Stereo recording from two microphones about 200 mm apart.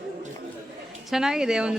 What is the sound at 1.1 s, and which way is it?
Speech, centre (ahead or behind).